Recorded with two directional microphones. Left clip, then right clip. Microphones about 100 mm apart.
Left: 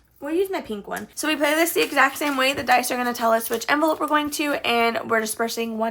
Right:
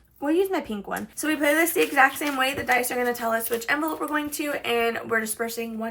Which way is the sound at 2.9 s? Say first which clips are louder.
Left 4 dB; 45° left (ahead or behind).